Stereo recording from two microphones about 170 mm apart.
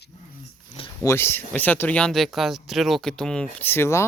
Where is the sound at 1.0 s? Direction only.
15° left (ahead or behind).